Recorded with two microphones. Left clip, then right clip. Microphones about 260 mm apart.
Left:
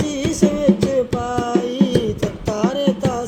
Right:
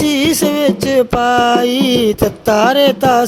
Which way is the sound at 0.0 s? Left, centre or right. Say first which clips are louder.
Right 6 dB; right.